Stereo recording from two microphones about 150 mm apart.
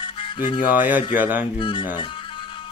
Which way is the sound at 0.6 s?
10° right (ahead or behind).